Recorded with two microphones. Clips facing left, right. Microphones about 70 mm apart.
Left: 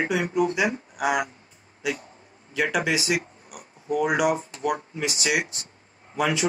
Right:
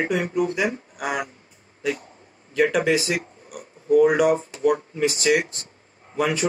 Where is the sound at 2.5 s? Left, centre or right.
Centre.